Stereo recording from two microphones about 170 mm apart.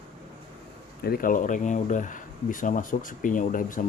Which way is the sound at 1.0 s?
60° left (ahead or behind).